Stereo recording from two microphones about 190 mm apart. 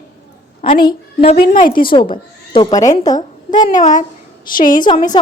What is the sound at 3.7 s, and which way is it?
A woman's voice, 40° left (ahead or behind).